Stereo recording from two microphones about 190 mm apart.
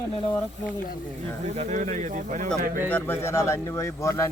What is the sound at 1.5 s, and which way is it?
Speech, 40° right (ahead or behind).